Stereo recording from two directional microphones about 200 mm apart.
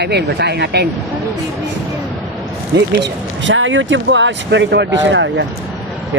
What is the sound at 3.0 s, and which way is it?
Speech, 70° right (ahead or behind).